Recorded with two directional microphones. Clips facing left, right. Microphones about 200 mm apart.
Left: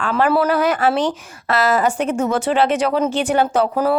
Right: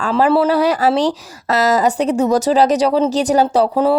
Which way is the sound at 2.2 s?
40° right (ahead or behind).